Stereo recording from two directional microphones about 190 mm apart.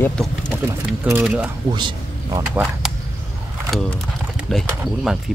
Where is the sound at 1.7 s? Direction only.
25° right (ahead or behind).